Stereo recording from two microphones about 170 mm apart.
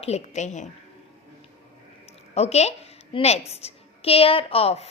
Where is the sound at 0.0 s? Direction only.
40° left (ahead or behind).